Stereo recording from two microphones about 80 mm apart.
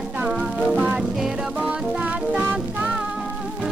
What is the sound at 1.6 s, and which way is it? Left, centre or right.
Music, centre.